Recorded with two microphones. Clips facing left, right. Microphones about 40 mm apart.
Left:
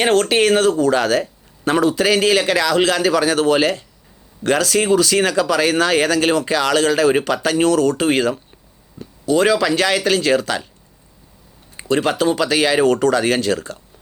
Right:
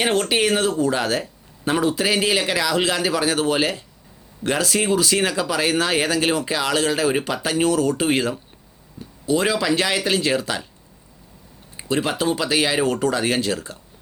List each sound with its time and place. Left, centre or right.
0.3 s speech: left
0.8 s speech: left
11.9 s speech: left